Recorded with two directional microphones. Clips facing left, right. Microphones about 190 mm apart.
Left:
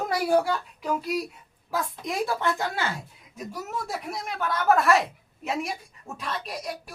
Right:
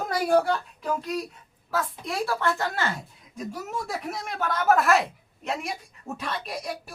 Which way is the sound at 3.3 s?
Centre (ahead or behind).